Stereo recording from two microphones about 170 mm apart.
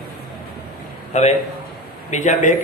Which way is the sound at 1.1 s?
45° left (ahead or behind).